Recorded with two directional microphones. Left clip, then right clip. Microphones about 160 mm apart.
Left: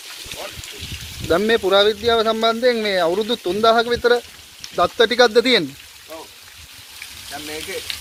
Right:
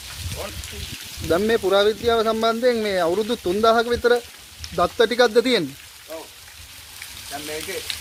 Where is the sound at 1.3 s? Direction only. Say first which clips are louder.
Left 3 dB; centre (ahead or behind).